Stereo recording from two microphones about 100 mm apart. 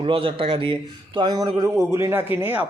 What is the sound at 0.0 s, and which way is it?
Speech, 60° right (ahead or behind).